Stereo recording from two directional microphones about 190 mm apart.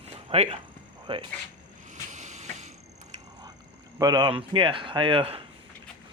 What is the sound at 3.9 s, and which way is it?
Speech, 20° right (ahead or behind).